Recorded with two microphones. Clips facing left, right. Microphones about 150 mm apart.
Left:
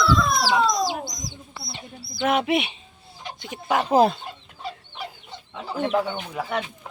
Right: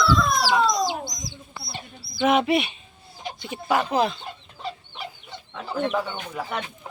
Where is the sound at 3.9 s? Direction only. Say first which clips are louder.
Left 5 dB; 45° left (ahead or behind).